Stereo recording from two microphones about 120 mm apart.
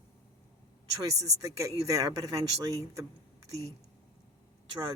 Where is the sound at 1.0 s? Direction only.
30° right (ahead or behind).